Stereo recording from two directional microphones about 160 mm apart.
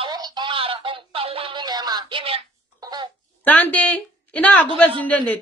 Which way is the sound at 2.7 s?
25° right (ahead or behind).